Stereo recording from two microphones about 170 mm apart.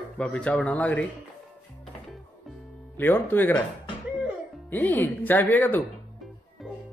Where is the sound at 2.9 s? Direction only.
10° left (ahead or behind).